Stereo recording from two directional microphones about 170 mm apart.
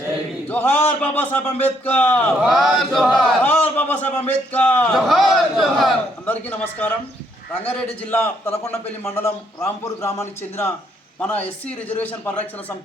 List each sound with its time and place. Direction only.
0.5 s a man's voice: 10° left (ahead or behind)
3.4 s a man's voice: 10° left (ahead or behind)